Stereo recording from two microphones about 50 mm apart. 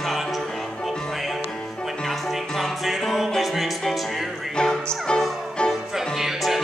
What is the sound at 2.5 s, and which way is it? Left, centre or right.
Music, centre.